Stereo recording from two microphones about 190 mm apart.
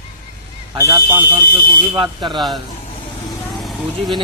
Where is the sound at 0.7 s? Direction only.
15° right (ahead or behind).